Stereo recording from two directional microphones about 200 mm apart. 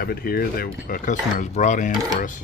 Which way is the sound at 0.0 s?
50° left (ahead or behind).